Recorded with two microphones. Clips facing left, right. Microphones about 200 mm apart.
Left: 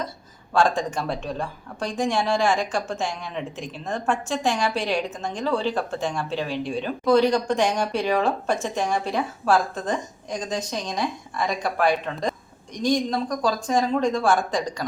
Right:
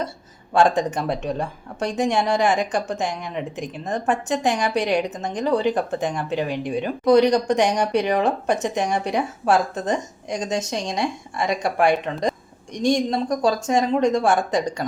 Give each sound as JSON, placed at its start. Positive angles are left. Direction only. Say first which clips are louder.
{"t": 0.5, "sound": "a woman's voice", "louder": "right 3 dB", "side_deg": -20}